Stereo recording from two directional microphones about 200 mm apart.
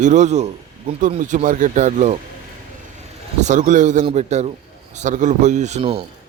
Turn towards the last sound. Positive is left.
turn(degrees=-30)  # may be behind; listen again after turning